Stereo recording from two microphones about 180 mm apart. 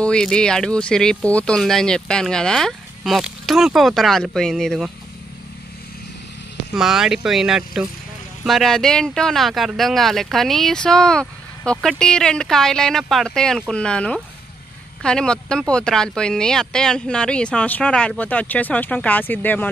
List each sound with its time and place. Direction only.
0.0 s speech: 5° left (ahead or behind)
6.7 s speech: centre (ahead or behind)